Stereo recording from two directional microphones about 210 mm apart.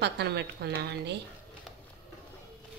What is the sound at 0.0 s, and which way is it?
A woman's voice, 50° right (ahead or behind).